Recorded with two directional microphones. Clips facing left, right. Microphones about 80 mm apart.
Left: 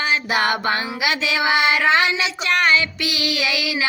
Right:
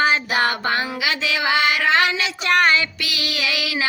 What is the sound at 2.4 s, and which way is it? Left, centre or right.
Music, right.